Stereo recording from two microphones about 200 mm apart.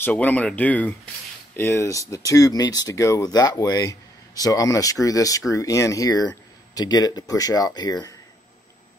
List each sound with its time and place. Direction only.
0.0 s speech: 5° left (ahead or behind)